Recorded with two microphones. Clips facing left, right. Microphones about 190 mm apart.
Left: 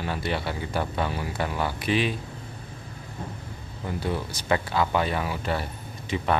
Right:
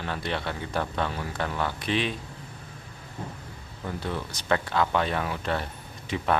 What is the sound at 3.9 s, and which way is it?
Speech, 10° left (ahead or behind).